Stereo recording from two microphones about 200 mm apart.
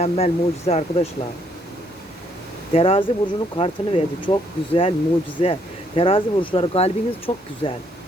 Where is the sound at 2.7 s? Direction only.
30° left (ahead or behind).